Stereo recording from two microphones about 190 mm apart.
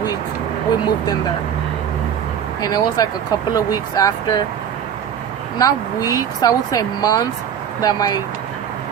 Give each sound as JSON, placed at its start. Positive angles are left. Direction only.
{"t": 2.6, "sound": "speech", "side_deg": 20}
{"t": 5.5, "sound": "speech", "side_deg": 20}